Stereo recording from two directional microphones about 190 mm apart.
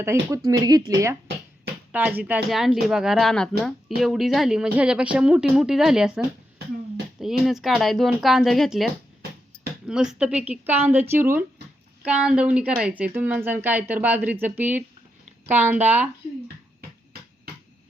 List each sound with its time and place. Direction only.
0.0 s speech: 15° right (ahead or behind)
1.9 s a woman's voice: 10° right (ahead or behind)